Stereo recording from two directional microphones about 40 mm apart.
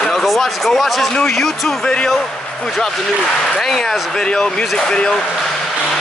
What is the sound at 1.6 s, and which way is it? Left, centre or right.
Speech, left.